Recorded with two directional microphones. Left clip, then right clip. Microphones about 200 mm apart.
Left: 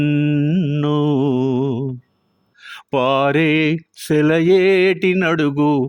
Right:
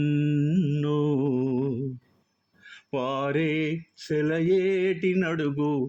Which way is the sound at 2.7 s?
50° left (ahead or behind).